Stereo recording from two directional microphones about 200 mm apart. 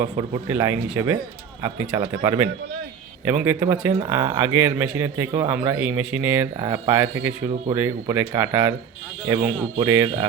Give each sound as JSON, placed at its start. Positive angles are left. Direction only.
{"t": 0.0, "sound": "speech", "side_deg": -15}
{"t": 9.7, "sound": "speech", "side_deg": -15}